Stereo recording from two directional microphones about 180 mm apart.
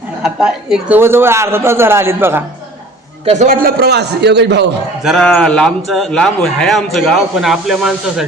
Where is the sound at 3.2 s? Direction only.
40° right (ahead or behind); by 4.7 s 70° right (ahead or behind).